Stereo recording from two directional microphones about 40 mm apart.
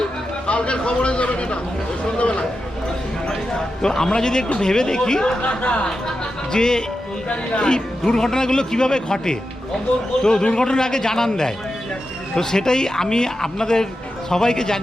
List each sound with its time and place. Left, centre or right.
0.4 s a man's voice: left
2.1 s a sound: left
3.8 s speech: centre
5.4 s speech: left
6.5 s speech: centre